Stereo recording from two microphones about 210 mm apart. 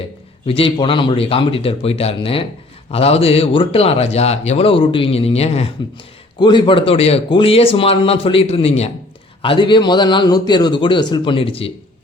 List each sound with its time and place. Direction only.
0.4 s a man's voice: 25° left (ahead or behind)